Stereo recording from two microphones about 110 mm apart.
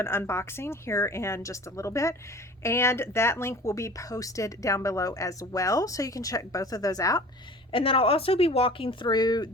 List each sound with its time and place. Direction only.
0.0 s a woman's voice: 20° left (ahead or behind)
7.7 s speech: 55° left (ahead or behind); by 9.5 s 40° left (ahead or behind)